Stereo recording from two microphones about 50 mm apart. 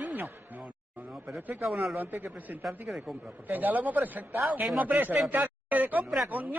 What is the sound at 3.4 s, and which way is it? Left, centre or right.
Speech, right.